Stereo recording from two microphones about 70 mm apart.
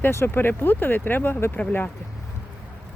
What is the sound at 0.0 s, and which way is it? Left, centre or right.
Speech, left.